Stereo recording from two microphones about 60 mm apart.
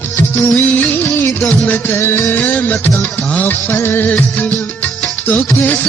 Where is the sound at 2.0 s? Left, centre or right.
Left.